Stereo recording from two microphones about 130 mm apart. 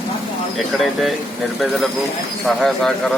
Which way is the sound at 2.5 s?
Centre (ahead or behind).